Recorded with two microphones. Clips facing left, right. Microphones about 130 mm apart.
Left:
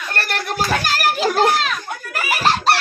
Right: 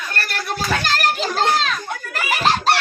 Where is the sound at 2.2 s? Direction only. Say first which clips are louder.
Left 1 dB; centre (ahead or behind).